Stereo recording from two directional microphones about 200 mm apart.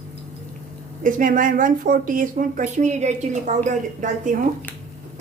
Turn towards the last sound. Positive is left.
turn(degrees=-40)  # may be behind; listen again after turning